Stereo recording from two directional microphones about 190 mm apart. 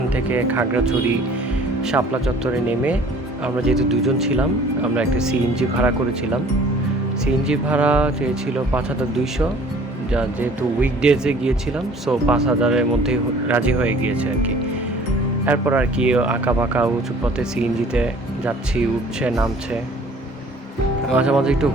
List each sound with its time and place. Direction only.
0.1 s speech: 10° right (ahead or behind)
2.2 s speech: 5° right (ahead or behind)
7.4 s speech: 5° right (ahead or behind)
21.1 s speech: 5° right (ahead or behind)